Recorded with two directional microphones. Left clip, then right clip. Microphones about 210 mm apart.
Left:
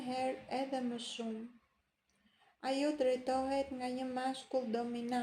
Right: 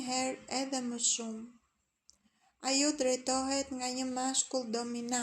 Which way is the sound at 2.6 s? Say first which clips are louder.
Right 3 dB; 50° right (ahead or behind).